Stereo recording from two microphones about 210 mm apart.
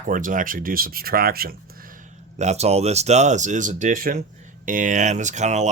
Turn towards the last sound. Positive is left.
turn(degrees=-35)  # may be behind; listen again after turning